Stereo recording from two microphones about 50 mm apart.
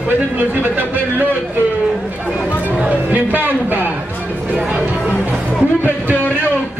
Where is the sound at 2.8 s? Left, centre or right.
Right.